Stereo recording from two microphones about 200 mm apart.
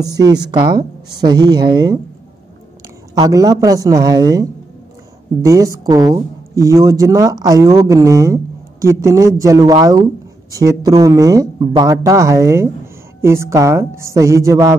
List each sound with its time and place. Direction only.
0.0 s a woman's voice: 20° right (ahead or behind)
3.2 s speech: 15° right (ahead or behind)